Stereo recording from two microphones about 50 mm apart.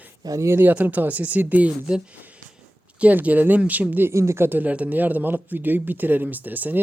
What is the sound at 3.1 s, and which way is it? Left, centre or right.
Speech, right.